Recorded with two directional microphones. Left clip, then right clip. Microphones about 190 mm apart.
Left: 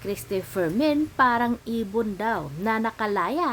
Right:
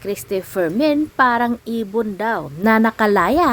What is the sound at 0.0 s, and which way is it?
A woman's voice, 30° right (ahead or behind).